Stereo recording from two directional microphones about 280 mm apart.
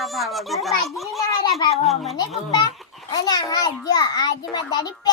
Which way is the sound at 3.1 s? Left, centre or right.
Centre.